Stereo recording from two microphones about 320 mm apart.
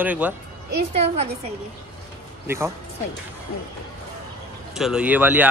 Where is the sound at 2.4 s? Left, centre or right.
Centre.